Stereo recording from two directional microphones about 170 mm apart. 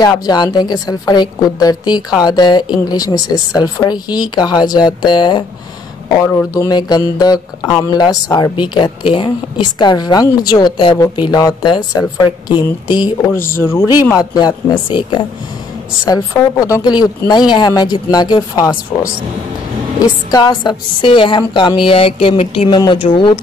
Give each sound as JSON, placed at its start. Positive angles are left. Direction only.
{"t": 0.0, "sound": "a woman's voice", "side_deg": 25}
{"t": 12.8, "sound": "a woman's voice", "side_deg": 25}
{"t": 13.6, "sound": "speech", "side_deg": 15}
{"t": 14.3, "sound": "a woman's voice", "side_deg": 25}